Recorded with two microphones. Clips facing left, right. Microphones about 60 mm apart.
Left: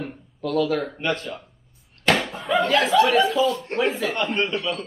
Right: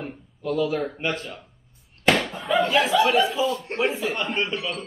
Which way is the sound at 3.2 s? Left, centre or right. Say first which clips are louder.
Left 2 dB; centre.